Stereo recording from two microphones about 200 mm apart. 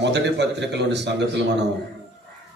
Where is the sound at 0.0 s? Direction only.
60° right (ahead or behind).